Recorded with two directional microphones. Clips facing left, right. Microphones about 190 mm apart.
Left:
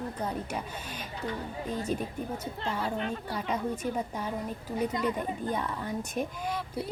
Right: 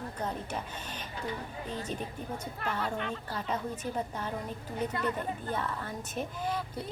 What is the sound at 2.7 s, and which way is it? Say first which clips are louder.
Speech: left 1 dB; 10° left (ahead or behind).